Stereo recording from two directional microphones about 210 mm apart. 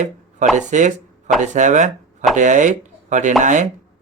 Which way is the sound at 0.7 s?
35° right (ahead or behind).